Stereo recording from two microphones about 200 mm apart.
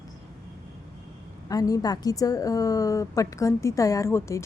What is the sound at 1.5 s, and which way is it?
A woman's voice, 20° left (ahead or behind).